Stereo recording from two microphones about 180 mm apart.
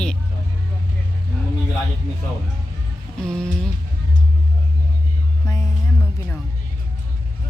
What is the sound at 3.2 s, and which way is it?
Speech, 5° left (ahead or behind).